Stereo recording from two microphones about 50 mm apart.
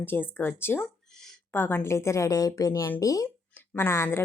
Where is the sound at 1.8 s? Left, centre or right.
Left.